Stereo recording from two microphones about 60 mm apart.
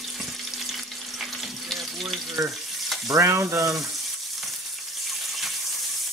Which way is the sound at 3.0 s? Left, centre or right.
Right.